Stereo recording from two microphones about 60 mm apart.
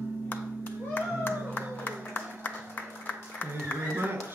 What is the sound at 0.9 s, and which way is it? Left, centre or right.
Music, left.